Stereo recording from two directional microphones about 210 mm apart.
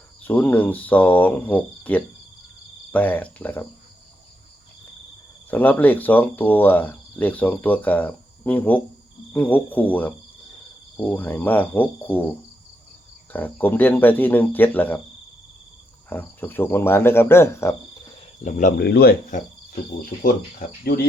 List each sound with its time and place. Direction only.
0.2 s speech: 10° left (ahead or behind)
5.5 s speech: 10° left (ahead or behind)
13.3 s speech: 10° left (ahead or behind)
16.0 s speech: 10° left (ahead or behind)
18.4 s speech: 35° left (ahead or behind)